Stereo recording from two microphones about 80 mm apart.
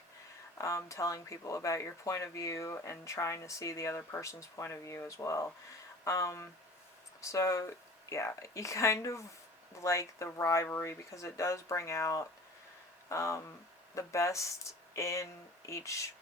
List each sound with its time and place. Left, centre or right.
0.6 s speech: left